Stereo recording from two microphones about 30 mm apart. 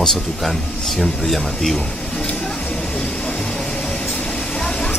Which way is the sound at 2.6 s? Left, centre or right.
Left.